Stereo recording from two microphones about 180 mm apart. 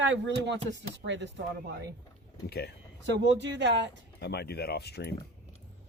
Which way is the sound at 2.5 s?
60° left (ahead or behind).